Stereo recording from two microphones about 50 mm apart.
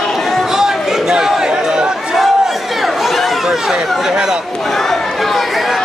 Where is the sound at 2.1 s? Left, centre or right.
Centre.